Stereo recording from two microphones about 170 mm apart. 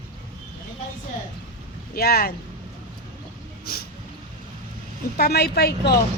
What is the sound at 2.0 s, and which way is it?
Speech, 65° left (ahead or behind).